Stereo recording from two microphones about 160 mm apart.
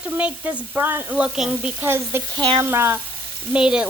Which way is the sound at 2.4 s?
25° right (ahead or behind).